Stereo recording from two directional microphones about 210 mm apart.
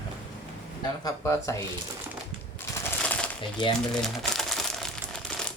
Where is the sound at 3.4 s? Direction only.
20° left (ahead or behind).